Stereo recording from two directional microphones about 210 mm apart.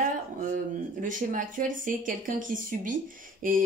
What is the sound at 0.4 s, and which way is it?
Speech, 40° right (ahead or behind).